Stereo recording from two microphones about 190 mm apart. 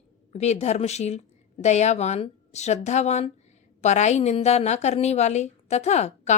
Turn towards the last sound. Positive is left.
turn(degrees=35)  # may be behind; listen again after turning